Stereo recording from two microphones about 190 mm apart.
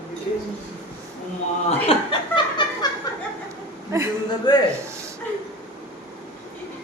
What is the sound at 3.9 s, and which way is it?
Speech, 15° right (ahead or behind).